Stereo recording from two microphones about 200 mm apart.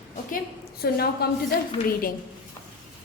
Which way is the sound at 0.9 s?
50° left (ahead or behind).